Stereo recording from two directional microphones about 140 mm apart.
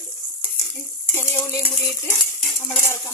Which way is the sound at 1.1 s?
20° left (ahead or behind).